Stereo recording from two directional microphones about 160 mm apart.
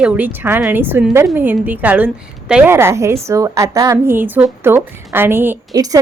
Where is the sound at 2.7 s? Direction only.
15° right (ahead or behind).